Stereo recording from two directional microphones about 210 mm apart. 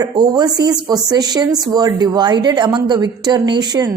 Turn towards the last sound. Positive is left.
turn(degrees=-20)  # may be behind; listen again after turning